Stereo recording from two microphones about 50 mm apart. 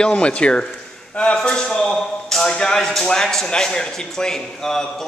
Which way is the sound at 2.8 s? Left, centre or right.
Centre.